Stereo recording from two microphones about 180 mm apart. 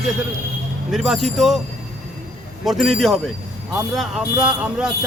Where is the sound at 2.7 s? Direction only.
Centre (ahead or behind).